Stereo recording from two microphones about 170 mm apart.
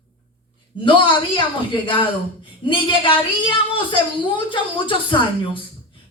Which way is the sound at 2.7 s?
30° left (ahead or behind).